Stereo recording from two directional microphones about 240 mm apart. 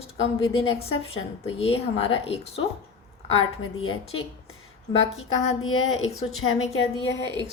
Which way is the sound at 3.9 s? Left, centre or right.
Left.